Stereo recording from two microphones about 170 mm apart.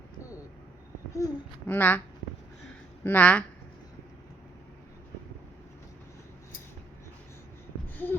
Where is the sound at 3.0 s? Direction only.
10° left (ahead or behind).